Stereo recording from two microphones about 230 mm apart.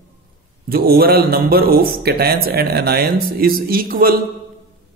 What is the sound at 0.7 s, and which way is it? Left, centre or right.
A man's voice, right.